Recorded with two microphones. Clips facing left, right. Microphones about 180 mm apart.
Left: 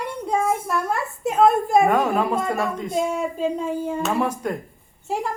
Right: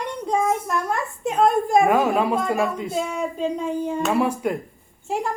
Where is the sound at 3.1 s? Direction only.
5° left (ahead or behind).